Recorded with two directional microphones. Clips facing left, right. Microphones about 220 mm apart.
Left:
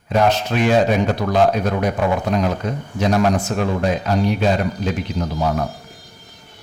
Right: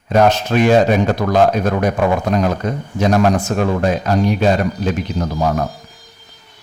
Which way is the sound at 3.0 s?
45° right (ahead or behind).